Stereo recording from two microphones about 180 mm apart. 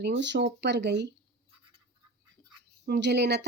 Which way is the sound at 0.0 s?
80° right.